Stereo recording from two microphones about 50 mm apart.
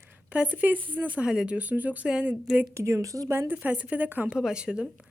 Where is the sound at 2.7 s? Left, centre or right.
Right.